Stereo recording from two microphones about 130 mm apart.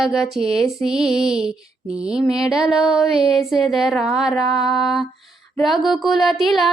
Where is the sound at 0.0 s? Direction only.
Centre (ahead or behind).